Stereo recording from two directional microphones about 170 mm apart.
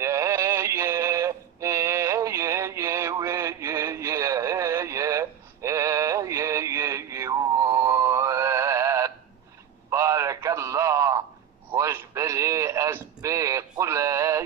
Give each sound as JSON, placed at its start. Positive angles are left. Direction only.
{"t": 0.0, "sound": "synthetic singing", "side_deg": -15}
{"t": 9.8, "sound": "a sound", "side_deg": -15}
{"t": 11.7, "sound": "radio", "side_deg": -15}